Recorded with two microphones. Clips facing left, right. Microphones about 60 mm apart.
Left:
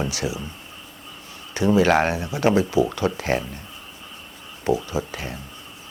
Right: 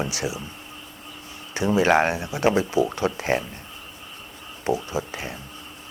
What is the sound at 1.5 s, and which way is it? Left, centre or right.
Speech, right.